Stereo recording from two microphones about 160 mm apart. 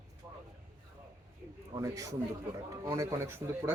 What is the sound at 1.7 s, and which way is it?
A man's voice, 20° right (ahead or behind).